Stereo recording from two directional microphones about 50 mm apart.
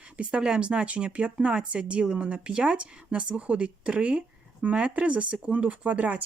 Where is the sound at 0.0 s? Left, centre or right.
Right.